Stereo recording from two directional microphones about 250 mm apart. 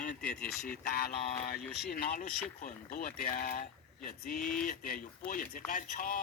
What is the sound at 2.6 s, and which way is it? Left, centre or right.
Speech, left.